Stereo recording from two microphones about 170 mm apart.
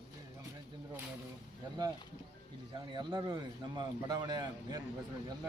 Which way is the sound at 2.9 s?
25° right (ahead or behind).